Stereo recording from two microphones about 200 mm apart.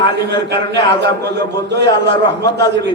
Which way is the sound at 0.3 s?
60° right (ahead or behind).